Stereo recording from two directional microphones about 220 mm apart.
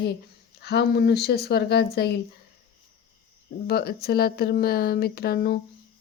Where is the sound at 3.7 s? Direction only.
45° left (ahead or behind).